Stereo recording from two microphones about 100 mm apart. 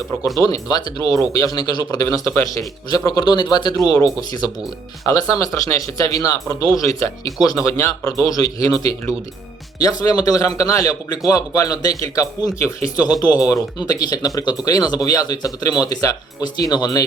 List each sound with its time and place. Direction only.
0.3 s speech: 35° left (ahead or behind)
2.0 s speech: 25° left (ahead or behind)